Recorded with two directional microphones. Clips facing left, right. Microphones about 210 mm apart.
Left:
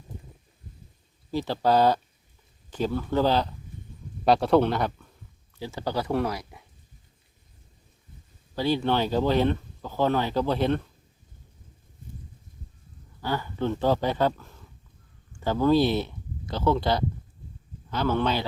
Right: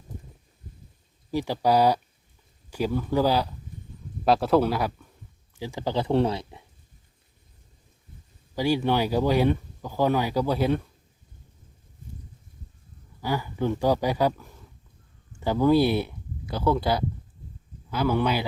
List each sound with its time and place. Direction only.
1.3 s speech: 15° right (ahead or behind)
8.5 s speech: 15° right (ahead or behind)
13.2 s speech: 15° right (ahead or behind)